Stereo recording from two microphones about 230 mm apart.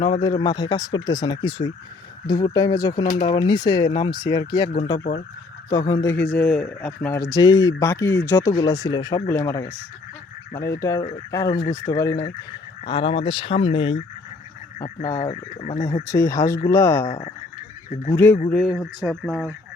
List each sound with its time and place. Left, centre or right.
0.0 s speech: left
4.9 s speech: left
5.9 s speech: centre
15.2 s speech: left
16.0 s speech: centre
17.1 s speech: left
18.1 s speech: centre